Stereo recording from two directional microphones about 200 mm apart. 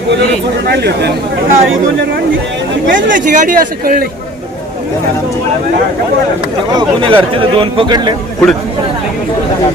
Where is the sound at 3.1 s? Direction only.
40° right (ahead or behind).